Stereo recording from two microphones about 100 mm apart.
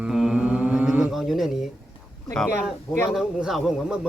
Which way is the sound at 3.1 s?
5° right (ahead or behind).